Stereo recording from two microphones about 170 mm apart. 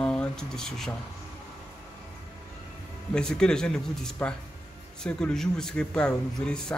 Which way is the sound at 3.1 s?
5° left (ahead or behind).